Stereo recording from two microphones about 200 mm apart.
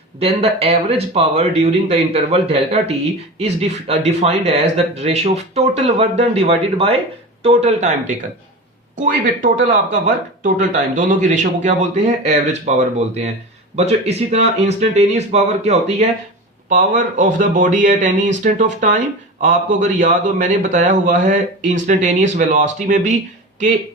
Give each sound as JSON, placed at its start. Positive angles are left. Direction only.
{"t": 0.2, "sound": "a man's voice", "side_deg": -30}